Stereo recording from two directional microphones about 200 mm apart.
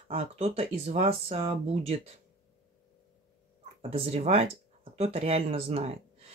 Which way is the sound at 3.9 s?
30° right (ahead or behind).